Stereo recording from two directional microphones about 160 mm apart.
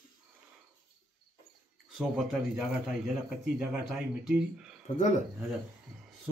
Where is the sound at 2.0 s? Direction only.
Centre (ahead or behind).